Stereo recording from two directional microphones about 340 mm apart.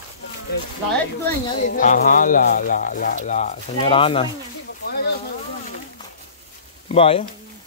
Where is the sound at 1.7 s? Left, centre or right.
Left.